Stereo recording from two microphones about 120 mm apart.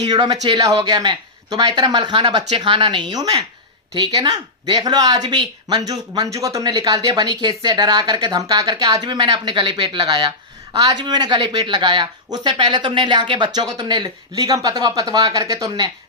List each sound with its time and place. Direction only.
0.0 s speech: 35° right (ahead or behind)